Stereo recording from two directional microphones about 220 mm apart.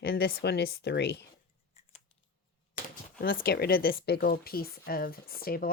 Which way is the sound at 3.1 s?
40° left (ahead or behind).